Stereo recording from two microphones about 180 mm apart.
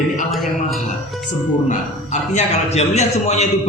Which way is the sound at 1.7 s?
40° left (ahead or behind).